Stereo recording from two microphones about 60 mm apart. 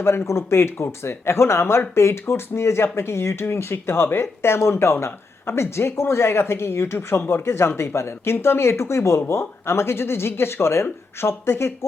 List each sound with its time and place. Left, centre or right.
0.3 s speech: left